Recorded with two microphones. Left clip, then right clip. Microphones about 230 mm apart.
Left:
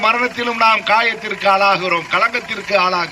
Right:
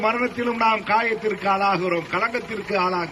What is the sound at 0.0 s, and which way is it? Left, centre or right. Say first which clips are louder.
A man's voice: left 6 dB; centre.